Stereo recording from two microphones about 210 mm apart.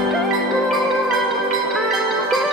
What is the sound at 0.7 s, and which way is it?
Music, centre (ahead or behind).